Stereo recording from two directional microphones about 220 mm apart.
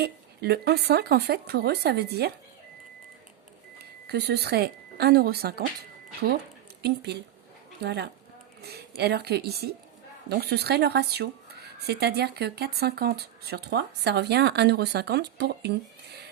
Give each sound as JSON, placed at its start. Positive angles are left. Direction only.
{"t": 0.0, "sound": "speech", "side_deg": -45}
{"t": 4.0, "sound": "speech", "side_deg": -50}
{"t": 6.8, "sound": "speech", "side_deg": -50}